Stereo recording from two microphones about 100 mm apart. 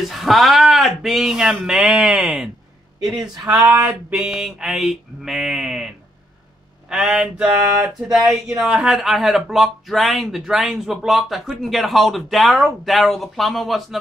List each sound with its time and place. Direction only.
0.1 s speech: centre (ahead or behind)
3.4 s speech: 35° right (ahead or behind)
4.1 s speech: 5° right (ahead or behind)